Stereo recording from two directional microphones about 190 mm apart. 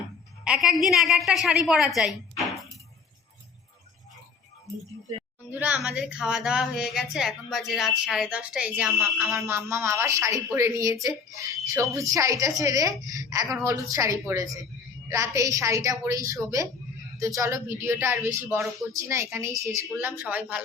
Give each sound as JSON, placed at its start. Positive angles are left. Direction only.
{"t": 0.4, "sound": "a woman's voice", "side_deg": -5}
{"t": 5.5, "sound": "a woman's voice", "side_deg": -10}